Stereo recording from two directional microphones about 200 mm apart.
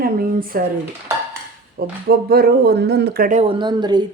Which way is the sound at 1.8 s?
50° right (ahead or behind).